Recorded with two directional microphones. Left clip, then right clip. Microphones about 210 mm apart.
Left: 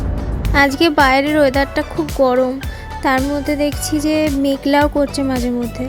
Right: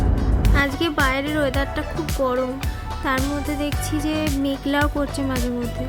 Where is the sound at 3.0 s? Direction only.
30° left (ahead or behind).